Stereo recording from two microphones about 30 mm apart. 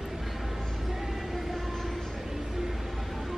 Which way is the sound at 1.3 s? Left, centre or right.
Centre.